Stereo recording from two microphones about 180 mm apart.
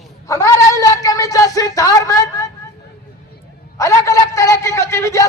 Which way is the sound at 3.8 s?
15° left (ahead or behind).